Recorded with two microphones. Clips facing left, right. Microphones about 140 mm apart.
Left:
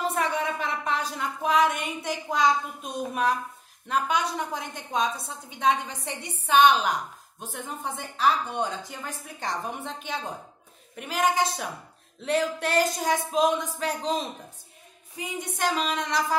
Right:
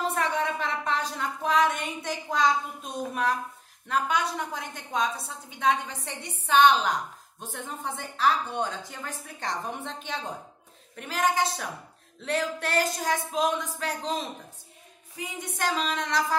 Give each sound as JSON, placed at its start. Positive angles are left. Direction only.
{"t": 0.2, "sound": "a woman's voice", "side_deg": 10}